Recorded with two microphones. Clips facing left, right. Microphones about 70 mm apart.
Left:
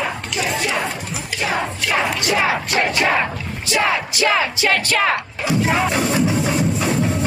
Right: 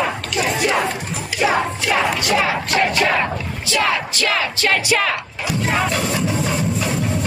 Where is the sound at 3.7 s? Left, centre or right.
Centre.